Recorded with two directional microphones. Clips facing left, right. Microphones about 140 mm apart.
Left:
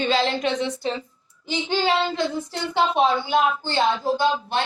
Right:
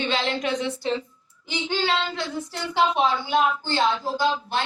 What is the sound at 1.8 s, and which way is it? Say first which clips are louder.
Speech: left 5 dB; 20° left (ahead or behind).